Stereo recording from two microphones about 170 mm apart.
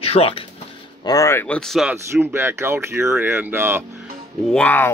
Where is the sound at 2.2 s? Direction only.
15° right (ahead or behind).